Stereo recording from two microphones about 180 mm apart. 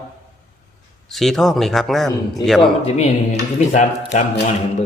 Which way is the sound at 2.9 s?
40° left (ahead or behind).